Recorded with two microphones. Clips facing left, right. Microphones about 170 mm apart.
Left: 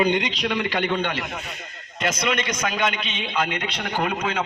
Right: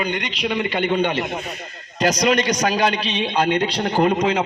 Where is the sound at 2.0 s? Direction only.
35° right (ahead or behind).